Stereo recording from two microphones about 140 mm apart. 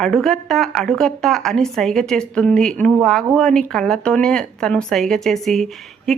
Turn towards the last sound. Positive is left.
turn(degrees=0)  # may be behind; listen again after turning